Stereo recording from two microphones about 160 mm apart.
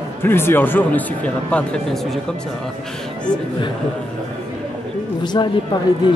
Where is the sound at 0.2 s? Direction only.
15° left (ahead or behind).